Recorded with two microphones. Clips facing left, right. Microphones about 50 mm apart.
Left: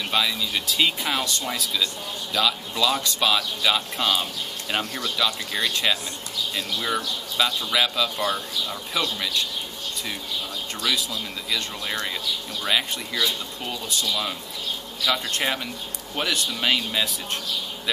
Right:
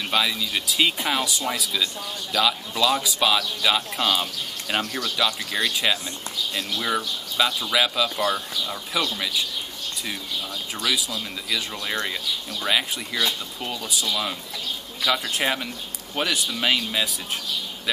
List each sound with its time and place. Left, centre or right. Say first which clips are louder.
0.1 s speech: right 1 dB; centre
10.8 s speech: even; centre
12.6 s speech: right 1 dB; centre